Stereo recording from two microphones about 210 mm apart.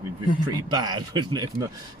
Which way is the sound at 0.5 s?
20° right (ahead or behind).